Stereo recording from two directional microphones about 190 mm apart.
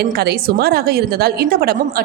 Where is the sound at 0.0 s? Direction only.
55° right (ahead or behind).